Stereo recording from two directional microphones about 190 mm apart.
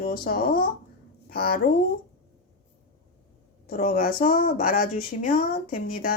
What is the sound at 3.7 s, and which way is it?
Speech, 50° left (ahead or behind).